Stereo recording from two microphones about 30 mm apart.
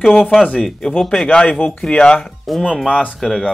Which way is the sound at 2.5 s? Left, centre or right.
Centre.